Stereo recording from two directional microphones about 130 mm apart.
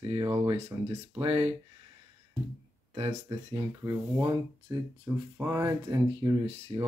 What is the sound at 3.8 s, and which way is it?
Speech, 25° right (ahead or behind).